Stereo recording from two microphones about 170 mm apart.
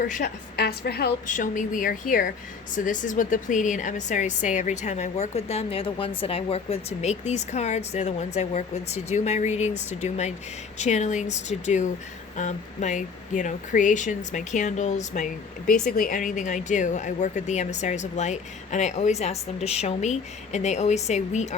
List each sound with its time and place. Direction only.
0.5 s a woman's voice: 70° left (ahead or behind)
1.3 s a woman's voice: 50° left (ahead or behind)